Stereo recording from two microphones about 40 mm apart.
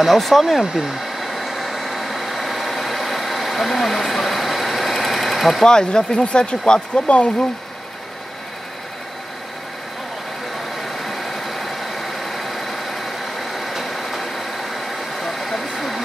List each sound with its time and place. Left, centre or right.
0.0 s speech: centre
0.8 s vehicle: centre
5.6 s speech: centre
10.8 s vehicle: centre